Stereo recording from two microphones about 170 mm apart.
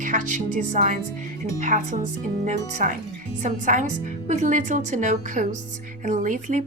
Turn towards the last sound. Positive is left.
turn(degrees=-45)  # may be behind; listen again after turning